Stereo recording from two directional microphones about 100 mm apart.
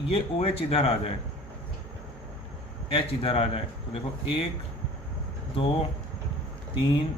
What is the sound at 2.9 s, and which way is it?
Speech, 70° left (ahead or behind).